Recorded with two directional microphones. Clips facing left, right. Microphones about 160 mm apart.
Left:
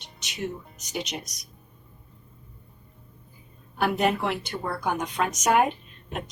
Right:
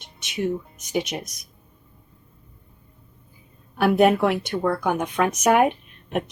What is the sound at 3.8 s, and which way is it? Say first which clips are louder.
Speech: right 7 dB; 55° right (ahead or behind).